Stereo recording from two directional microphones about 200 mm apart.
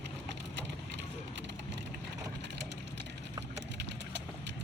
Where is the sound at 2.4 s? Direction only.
60° right (ahead or behind).